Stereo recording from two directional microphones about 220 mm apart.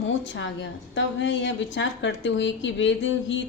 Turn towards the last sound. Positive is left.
turn(degrees=55)  # may be behind; listen again after turning